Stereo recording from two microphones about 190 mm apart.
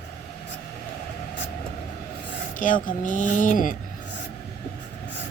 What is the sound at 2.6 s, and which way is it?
Speech, 45° left (ahead or behind).